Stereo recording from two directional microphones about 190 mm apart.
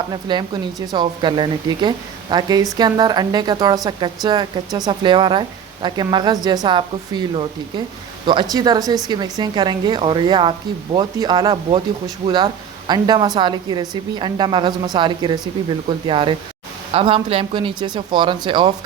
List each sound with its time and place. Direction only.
0.1 s a woman's voice: 25° right (ahead or behind)
12.9 s a woman's voice: 20° right (ahead or behind)